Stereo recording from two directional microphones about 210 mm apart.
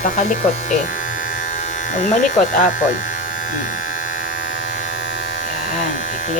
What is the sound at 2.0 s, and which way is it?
Speech, 35° left (ahead or behind).